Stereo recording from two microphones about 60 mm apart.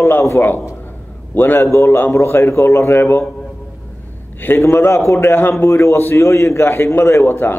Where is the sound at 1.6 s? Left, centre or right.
Left.